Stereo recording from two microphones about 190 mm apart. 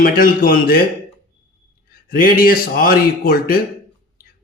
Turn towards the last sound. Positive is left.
turn(degrees=50)  # may be behind; listen again after turning